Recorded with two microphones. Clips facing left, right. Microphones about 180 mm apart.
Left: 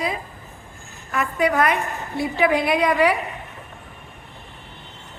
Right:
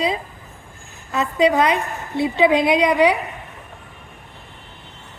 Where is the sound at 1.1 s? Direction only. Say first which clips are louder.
Right 4 dB; 20° right (ahead or behind).